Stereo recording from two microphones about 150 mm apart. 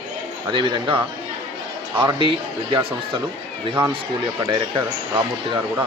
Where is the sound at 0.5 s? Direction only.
30° right (ahead or behind).